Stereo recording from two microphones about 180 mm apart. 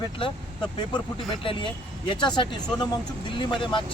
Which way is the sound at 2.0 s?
25° left (ahead or behind).